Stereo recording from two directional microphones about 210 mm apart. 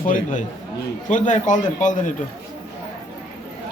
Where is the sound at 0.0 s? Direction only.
40° left (ahead or behind).